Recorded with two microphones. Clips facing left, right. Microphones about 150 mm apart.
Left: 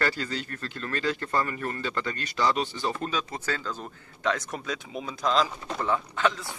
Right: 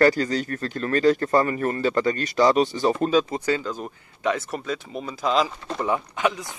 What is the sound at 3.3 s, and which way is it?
Speech, 15° right (ahead or behind).